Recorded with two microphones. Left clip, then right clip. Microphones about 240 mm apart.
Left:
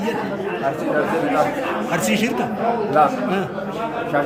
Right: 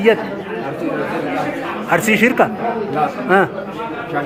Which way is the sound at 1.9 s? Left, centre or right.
Centre.